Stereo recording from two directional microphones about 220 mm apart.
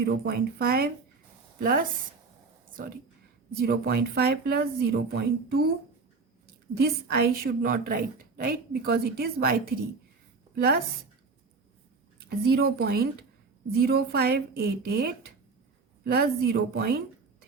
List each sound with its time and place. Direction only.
0.0 s a woman's voice: 45° right (ahead or behind)
3.6 s a woman's voice: 45° right (ahead or behind)
6.7 s a woman's voice: 45° right (ahead or behind)
12.3 s a woman's voice: 45° right (ahead or behind)